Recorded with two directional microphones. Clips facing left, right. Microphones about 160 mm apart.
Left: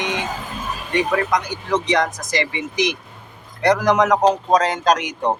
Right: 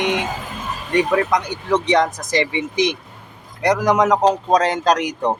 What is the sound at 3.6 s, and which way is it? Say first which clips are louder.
Speech: even; 15° right (ahead or behind).